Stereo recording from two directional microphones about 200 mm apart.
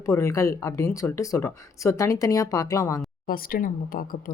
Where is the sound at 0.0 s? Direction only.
15° left (ahead or behind).